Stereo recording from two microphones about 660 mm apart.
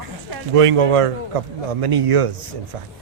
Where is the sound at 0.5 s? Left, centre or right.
Right.